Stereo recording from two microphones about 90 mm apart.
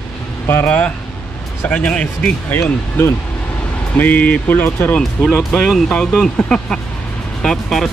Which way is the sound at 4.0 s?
20° left (ahead or behind).